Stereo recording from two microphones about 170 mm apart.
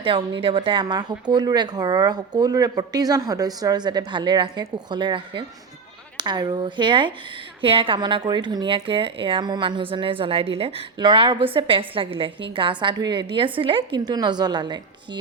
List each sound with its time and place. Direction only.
0.0 s a woman's voice: 30° right (ahead or behind)